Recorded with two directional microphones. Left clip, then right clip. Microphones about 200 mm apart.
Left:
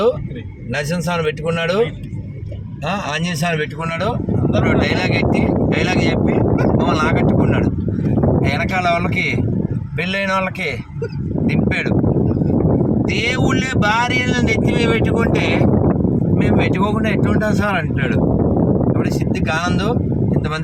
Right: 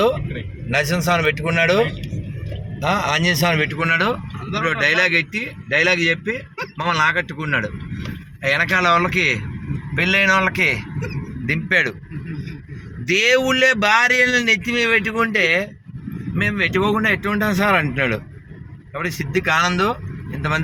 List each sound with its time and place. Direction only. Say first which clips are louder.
0.7 s speech: right 3 dB; 15° right (ahead or behind)
2.8 s speech: right 4 dB; 15° right (ahead or behind)
3.8 s speech: right 5 dB; centre (ahead or behind)
4.6 s speech: right 4 dB; 10° right (ahead or behind)
13.1 s speech: right 8 dB; centre (ahead or behind)